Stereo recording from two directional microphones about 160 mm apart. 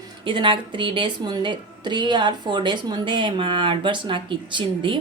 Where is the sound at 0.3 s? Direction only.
30° right (ahead or behind).